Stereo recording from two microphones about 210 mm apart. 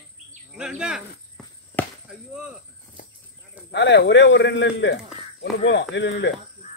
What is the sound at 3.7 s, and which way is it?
A man's voice, 55° left (ahead or behind).